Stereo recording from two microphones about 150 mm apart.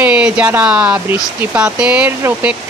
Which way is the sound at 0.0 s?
10° right (ahead or behind).